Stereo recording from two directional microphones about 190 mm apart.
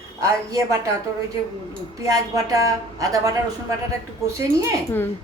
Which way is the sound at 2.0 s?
20° right (ahead or behind).